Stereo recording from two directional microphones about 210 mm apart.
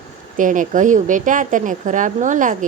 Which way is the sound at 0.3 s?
40° right (ahead or behind).